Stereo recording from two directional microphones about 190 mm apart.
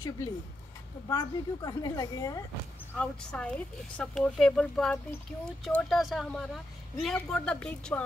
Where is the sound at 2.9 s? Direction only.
5° left (ahead or behind).